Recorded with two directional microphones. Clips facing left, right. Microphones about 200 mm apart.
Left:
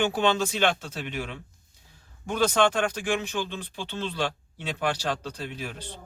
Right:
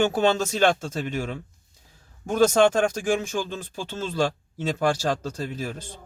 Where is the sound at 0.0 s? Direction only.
45° right (ahead or behind).